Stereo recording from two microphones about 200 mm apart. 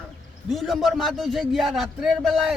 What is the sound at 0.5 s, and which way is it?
Speech, centre (ahead or behind).